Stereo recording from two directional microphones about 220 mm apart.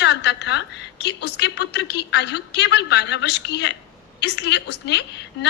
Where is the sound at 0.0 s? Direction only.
50° left (ahead or behind).